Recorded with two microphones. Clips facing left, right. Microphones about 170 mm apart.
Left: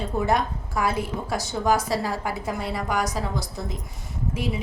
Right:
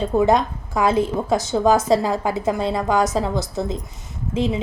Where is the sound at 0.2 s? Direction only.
20° right (ahead or behind).